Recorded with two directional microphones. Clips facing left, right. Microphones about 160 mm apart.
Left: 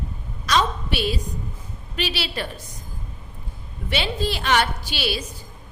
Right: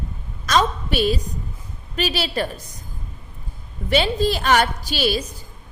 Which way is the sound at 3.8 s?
45° right (ahead or behind).